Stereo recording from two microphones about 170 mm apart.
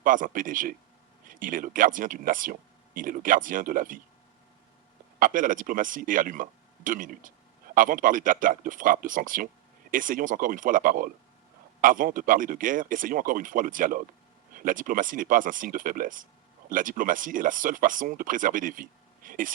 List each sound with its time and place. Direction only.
0.0 s speech: 50° right (ahead or behind)
5.2 s speech: 50° right (ahead or behind)